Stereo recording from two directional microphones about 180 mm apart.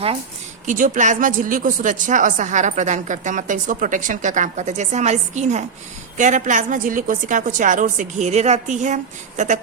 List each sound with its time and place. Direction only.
0.6 s speech: 45° right (ahead or behind)